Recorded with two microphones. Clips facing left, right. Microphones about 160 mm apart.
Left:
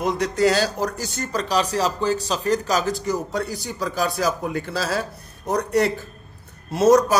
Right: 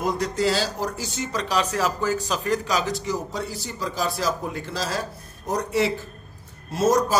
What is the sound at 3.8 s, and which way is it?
Speech, 60° left (ahead or behind).